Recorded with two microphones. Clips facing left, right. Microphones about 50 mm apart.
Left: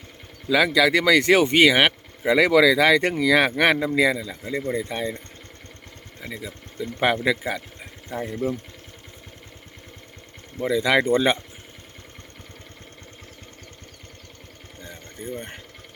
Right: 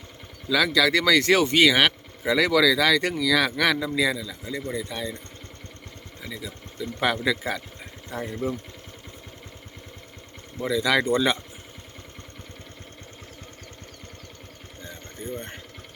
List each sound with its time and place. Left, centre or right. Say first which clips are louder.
0.4 s speech: left 3 dB; centre
6.1 s speech: left 2 dB; left
10.6 s speech: left 2 dB; left
14.8 s pour: left 1 dB; centre